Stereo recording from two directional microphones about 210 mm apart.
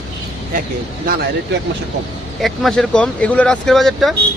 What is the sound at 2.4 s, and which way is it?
Speech, centre (ahead or behind).